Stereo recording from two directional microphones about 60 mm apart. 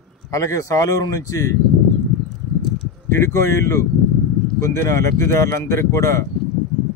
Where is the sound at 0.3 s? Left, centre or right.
Left.